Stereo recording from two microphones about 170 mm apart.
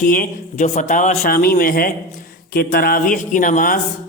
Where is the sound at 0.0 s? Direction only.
50° left (ahead or behind).